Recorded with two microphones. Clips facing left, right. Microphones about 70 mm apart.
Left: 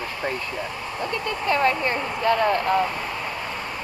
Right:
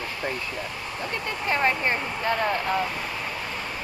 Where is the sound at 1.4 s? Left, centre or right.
Right.